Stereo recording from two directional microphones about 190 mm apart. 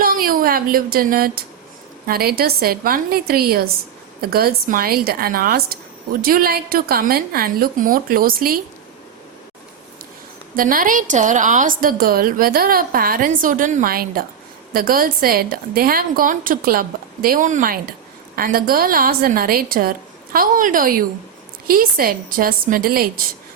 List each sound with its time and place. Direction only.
0.0 s a woman's voice: 50° right (ahead or behind)
10.5 s a woman's voice: 45° right (ahead or behind)